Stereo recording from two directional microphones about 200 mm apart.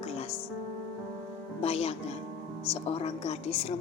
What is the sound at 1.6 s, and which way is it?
A woman's voice, 30° left (ahead or behind).